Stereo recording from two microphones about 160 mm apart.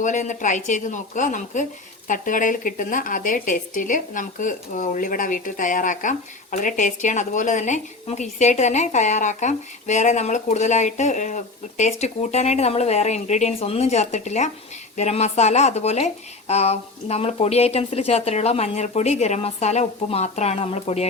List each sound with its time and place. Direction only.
0.0 s speech: 50° left (ahead or behind)